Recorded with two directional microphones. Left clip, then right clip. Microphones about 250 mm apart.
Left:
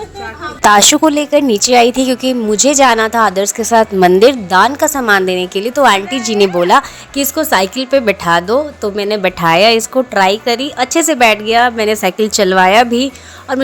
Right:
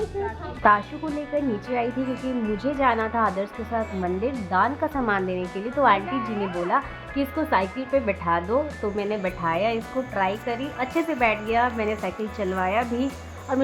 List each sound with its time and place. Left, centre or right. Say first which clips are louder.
0.6 s a woman's voice: left 11 dB; left
1.3 s a woman's voice: left 16 dB; left